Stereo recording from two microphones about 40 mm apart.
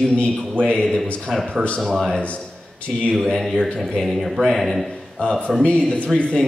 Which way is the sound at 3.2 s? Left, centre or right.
Centre.